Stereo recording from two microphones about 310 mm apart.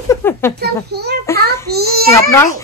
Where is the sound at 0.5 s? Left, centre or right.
Right.